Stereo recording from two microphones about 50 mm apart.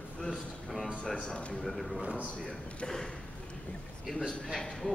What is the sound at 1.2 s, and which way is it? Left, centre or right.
Speech, left.